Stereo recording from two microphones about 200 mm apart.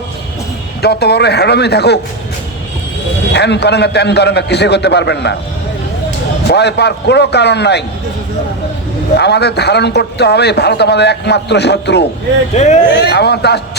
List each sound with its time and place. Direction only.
0.8 s a man's voice: 55° left (ahead or behind)
3.3 s a man's voice: 60° left (ahead or behind)
6.5 s a man's voice: 55° left (ahead or behind)
9.1 s a man's voice: 55° left (ahead or behind)
12.5 s speech: 35° left (ahead or behind)
13.0 s a man's voice: 55° left (ahead or behind)